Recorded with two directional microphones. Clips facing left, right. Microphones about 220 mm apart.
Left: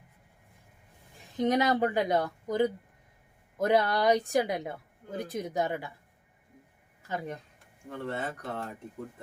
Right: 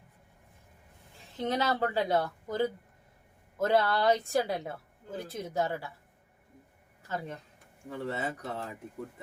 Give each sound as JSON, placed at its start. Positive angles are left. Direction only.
{"t": 1.4, "sound": "a woman's voice", "side_deg": 15}
{"t": 7.1, "sound": "a woman's voice", "side_deg": 15}
{"t": 7.9, "sound": "speech", "side_deg": -5}